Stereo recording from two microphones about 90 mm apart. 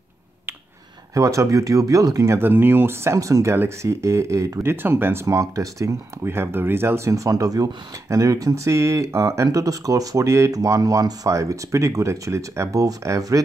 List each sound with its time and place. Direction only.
1.1 s speech: 35° right (ahead or behind)
2.3 s speech: 25° right (ahead or behind)
4.8 s speech: 25° right (ahead or behind)